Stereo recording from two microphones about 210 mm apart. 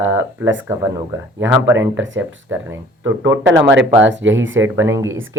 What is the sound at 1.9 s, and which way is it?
Speech, 65° right (ahead or behind).